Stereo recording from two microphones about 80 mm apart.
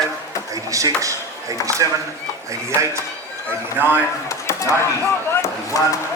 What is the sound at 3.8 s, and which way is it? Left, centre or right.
Speech, right.